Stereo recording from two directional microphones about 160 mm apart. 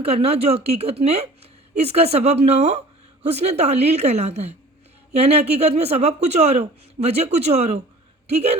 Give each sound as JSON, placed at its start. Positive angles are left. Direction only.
{"t": 0.0, "sound": "a woman's voice", "side_deg": -40}